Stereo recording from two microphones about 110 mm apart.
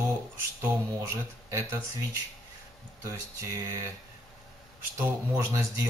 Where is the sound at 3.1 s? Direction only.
20° right (ahead or behind).